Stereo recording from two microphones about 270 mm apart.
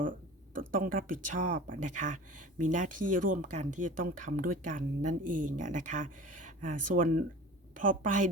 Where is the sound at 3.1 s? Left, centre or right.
Right.